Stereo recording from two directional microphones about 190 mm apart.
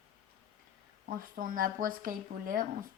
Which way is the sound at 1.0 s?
50° right (ahead or behind).